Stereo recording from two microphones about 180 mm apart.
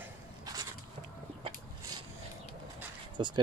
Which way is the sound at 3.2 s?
30° right (ahead or behind).